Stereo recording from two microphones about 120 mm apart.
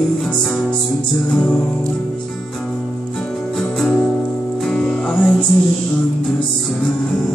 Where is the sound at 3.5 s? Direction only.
5° left (ahead or behind).